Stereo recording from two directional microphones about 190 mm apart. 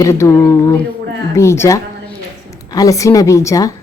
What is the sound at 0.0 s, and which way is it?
A woman's voice, 15° left (ahead or behind).